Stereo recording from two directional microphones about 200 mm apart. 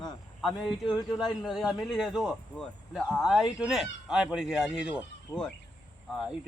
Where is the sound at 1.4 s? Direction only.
Centre (ahead or behind).